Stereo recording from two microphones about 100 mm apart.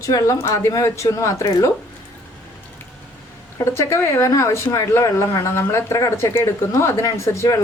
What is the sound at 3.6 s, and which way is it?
Speech, 25° left (ahead or behind).